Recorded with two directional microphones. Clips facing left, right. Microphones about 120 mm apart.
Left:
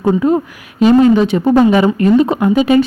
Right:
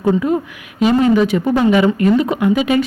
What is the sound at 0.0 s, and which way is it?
A woman's voice, 30° left (ahead or behind).